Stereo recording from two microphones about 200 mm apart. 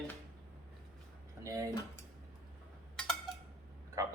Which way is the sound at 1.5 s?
15° right (ahead or behind).